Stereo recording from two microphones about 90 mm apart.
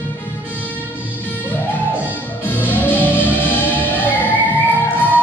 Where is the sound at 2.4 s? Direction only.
20° left (ahead or behind).